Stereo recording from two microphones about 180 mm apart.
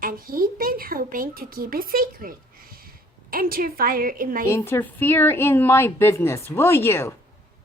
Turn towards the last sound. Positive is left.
turn(degrees=15)  # may be behind; listen again after turning